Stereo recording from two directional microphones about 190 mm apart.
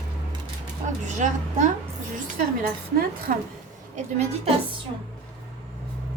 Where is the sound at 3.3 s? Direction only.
45° right (ahead or behind).